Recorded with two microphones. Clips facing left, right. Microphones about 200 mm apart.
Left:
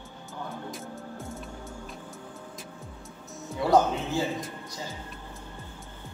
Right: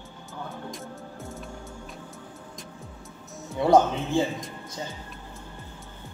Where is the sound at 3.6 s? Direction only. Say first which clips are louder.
Right 3 dB; 25° right (ahead or behind).